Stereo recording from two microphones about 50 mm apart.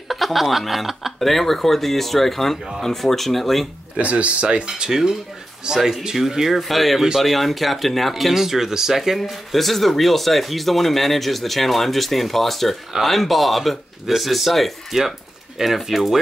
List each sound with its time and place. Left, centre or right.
0.1 s speech: centre
4.0 s speech: right; by 16.2 s centre